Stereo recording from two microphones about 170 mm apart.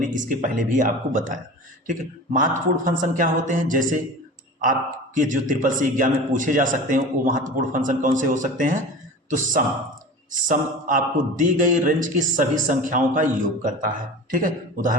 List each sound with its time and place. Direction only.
0.0 s a man's voice: 50° right (ahead or behind)
5.1 s a man's voice: 50° right (ahead or behind)